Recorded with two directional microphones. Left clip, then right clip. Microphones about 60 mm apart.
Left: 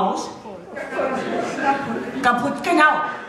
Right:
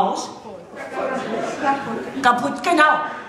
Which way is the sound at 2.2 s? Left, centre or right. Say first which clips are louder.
Right 2 dB; right.